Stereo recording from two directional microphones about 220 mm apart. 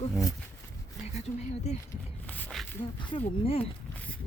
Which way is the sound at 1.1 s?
30° left (ahead or behind).